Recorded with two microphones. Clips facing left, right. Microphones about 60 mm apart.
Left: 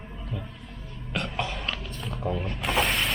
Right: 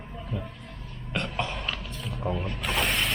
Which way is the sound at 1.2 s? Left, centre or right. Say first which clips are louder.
Even; centre.